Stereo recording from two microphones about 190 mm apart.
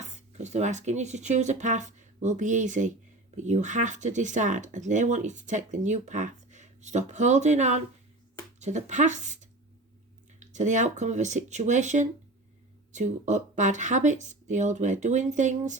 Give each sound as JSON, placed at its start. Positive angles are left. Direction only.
{"t": 0.0, "sound": "speech", "side_deg": -40}